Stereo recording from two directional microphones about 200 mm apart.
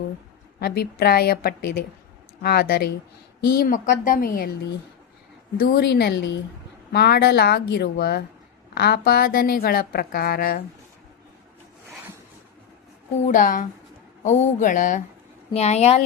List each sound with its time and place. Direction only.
0.6 s a woman's voice: 50° left (ahead or behind)
5.5 s a woman's voice: 55° left (ahead or behind)
13.2 s speech: 40° left (ahead or behind)